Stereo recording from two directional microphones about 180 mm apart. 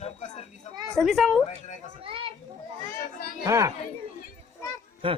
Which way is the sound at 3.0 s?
55° left (ahead or behind).